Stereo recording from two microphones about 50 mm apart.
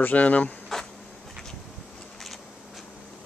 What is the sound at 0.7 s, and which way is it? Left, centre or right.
Bee, centre.